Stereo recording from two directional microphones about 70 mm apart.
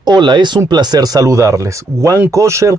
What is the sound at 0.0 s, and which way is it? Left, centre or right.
Speech, right.